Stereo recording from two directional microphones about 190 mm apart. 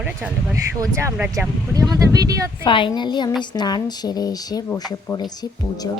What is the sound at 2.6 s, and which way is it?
Speech, 25° left (ahead or behind).